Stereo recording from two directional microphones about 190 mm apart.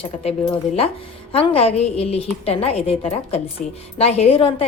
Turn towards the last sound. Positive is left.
turn(degrees=30)  # may be behind; listen again after turning